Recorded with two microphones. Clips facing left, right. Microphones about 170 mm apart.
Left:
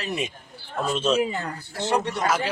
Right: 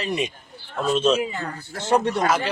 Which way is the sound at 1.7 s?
50° right (ahead or behind).